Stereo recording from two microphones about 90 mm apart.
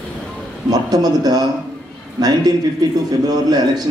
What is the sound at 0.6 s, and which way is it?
Speech, 45° right (ahead or behind).